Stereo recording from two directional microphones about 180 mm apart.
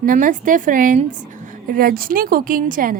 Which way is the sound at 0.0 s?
50° right (ahead or behind).